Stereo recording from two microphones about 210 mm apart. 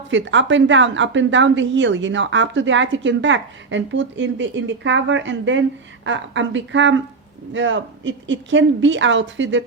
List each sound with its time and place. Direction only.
0.1 s a woman's voice: 60° right (ahead or behind)